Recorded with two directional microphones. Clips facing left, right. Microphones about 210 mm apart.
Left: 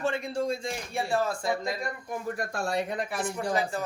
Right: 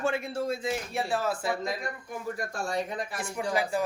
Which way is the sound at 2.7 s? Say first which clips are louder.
Left 1 dB; 65° left (ahead or behind).